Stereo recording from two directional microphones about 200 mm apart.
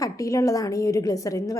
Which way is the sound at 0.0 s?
15° left (ahead or behind).